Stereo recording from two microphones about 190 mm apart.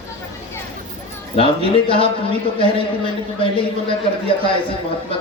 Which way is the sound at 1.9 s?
30° left (ahead or behind).